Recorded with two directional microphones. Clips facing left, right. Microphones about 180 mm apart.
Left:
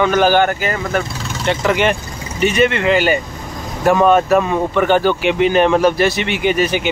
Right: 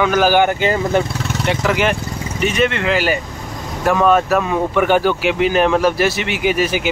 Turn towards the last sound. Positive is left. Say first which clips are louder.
# left 1 dB
turn(degrees=-5)  # may be behind; listen again after turning